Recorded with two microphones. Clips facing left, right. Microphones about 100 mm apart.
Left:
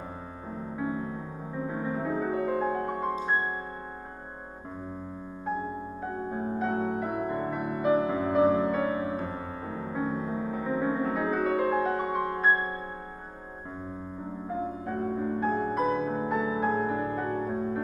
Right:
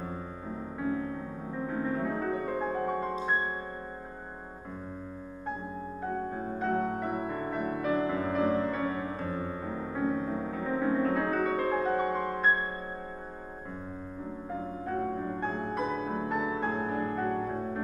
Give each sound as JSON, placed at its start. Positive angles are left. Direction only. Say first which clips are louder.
{"t": 0.7, "sound": "music", "louder": "even", "side_deg": 15}
{"t": 6.3, "sound": "music", "louder": "left 3 dB", "side_deg": 10}
{"t": 7.9, "sound": "music", "louder": "left 5 dB", "side_deg": 15}
{"t": 15.4, "sound": "music", "louder": "left 6 dB", "side_deg": 5}